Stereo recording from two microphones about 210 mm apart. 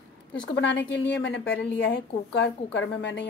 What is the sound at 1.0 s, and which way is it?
A woman's voice, 55° left (ahead or behind).